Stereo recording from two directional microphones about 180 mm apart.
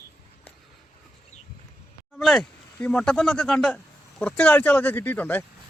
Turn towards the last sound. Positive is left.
turn(degrees=10)  # may be behind; listen again after turning